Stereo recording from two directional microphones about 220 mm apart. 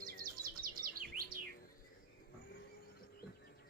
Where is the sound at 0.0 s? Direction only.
40° right (ahead or behind).